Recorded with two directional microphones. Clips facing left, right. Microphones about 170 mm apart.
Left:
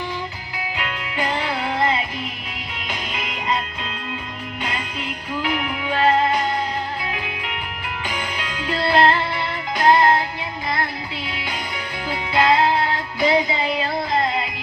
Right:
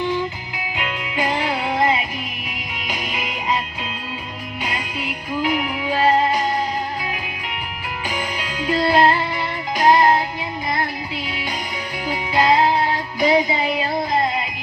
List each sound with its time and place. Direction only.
0.8 s music: 15° right (ahead or behind)
8.5 s music: 10° right (ahead or behind)
11.3 s music: 15° right (ahead or behind)